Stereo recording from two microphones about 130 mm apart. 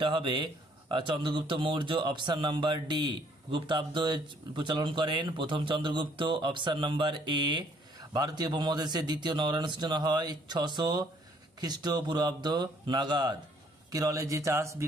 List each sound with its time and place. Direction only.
0.0 s speech: 40° right (ahead or behind); by 14.9 s 20° right (ahead or behind)